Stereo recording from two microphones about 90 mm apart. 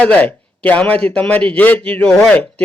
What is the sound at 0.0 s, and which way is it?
Speech, 15° left (ahead or behind).